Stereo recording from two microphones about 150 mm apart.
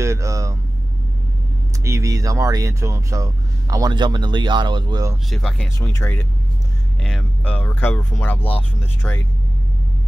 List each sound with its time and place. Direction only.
0.0 s vehicle: 20° right (ahead or behind)
1.9 s speech: 20° right (ahead or behind)
5.3 s speech: centre (ahead or behind)
5.8 s speech: 15° left (ahead or behind)
7.0 s speech: 5° left (ahead or behind)